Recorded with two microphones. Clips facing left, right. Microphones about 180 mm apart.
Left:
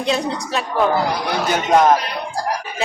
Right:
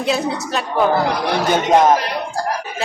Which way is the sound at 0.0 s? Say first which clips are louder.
Right 1 dB; 5° right (ahead or behind).